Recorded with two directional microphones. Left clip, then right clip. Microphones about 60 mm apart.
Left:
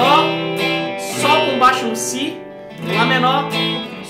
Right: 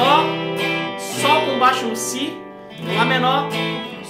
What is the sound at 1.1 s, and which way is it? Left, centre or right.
Music, centre.